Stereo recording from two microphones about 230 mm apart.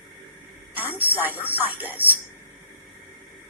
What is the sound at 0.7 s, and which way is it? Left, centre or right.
A woman's voice, centre.